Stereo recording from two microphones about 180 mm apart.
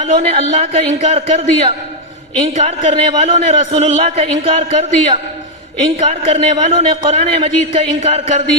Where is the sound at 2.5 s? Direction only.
40° right (ahead or behind).